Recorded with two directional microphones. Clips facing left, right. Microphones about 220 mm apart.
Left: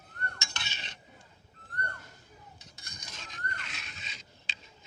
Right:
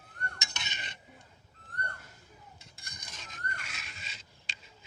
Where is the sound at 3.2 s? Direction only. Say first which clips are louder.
Left 1 dB; 5° right (ahead or behind).